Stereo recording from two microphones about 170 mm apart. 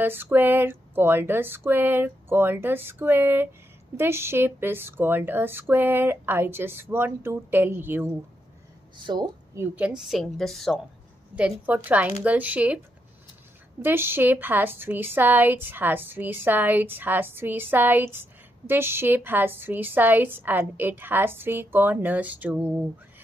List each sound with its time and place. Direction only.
0.0 s a woman's voice: 10° right (ahead or behind)
8.9 s speech: 25° right (ahead or behind)
9.6 s a woman's voice: 10° right (ahead or behind)
11.6 s a woman's voice: 10° right (ahead or behind)